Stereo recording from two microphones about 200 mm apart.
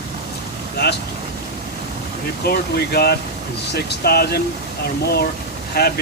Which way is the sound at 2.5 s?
50° left (ahead or behind).